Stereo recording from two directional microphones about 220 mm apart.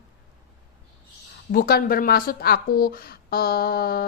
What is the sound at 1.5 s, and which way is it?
Speech, 40° left (ahead or behind).